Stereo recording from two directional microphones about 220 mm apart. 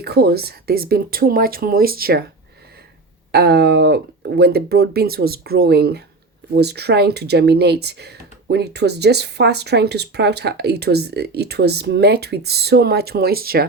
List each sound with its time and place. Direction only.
0.0 s speech: 45° right (ahead or behind)
3.3 s speech: 50° right (ahead or behind)